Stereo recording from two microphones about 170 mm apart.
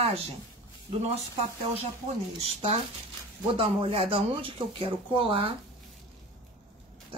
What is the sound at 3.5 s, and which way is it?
Speech, 30° right (ahead or behind).